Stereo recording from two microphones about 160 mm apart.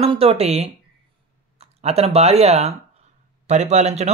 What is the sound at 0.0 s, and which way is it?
Speech, 35° right (ahead or behind).